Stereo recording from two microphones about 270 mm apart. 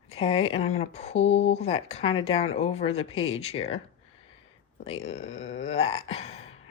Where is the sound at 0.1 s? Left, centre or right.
Left.